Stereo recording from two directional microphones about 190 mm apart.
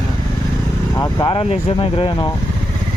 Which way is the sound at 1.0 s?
25° left (ahead or behind).